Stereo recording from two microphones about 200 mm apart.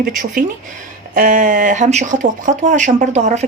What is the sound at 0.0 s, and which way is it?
Speech, 45° right (ahead or behind).